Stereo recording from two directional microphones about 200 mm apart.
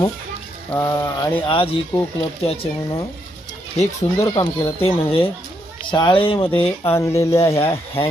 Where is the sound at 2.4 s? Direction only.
30° left (ahead or behind).